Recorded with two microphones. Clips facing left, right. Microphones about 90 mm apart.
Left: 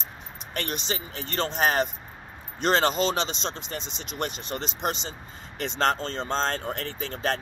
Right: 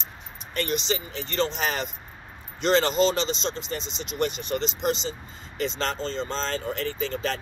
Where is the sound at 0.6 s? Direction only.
50° left (ahead or behind).